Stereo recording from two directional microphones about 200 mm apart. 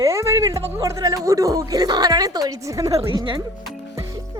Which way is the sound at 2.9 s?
30° right (ahead or behind).